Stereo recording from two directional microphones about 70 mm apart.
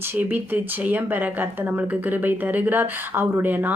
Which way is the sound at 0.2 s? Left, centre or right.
Right.